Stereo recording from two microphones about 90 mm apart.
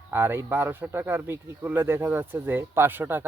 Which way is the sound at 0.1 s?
25° right (ahead or behind).